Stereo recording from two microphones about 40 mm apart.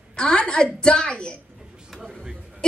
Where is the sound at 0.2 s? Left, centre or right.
Left.